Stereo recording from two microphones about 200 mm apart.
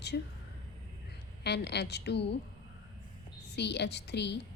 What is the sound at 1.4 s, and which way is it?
Speech, 55° left (ahead or behind).